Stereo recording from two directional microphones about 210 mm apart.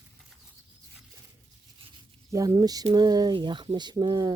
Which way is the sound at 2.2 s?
15° right (ahead or behind).